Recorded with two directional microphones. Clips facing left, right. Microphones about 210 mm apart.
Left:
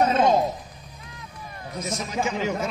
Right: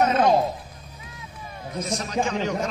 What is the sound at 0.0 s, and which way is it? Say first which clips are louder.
Speech: even; 25° left (ahead or behind).